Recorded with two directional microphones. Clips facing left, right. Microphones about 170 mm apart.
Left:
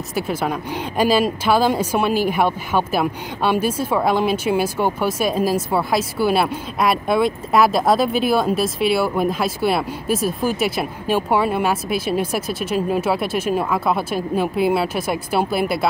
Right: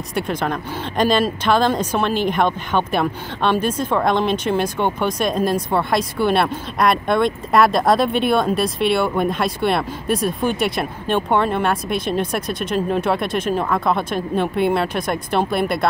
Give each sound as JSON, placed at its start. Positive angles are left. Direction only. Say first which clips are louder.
{"t": 0.1, "sound": "speech", "louder": "even", "side_deg": 5}